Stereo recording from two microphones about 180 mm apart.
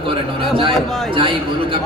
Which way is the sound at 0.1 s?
30° right (ahead or behind).